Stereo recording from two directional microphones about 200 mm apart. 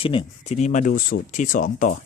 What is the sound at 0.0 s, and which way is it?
Speech, 25° left (ahead or behind).